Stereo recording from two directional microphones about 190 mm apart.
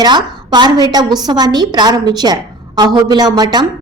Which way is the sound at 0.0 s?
20° right (ahead or behind).